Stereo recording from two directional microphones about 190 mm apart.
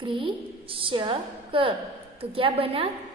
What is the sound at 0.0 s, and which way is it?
A woman's voice, 25° right (ahead or behind).